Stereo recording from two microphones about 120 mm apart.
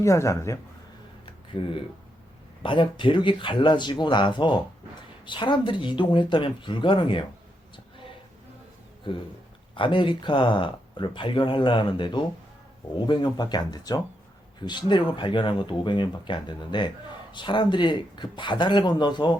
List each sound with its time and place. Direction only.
0.0 s a man's voice: 25° left (ahead or behind)
1.2 s a sound: 50° left (ahead or behind)
2.6 s speech: 45° left (ahead or behind)
9.1 s speech: 45° left (ahead or behind)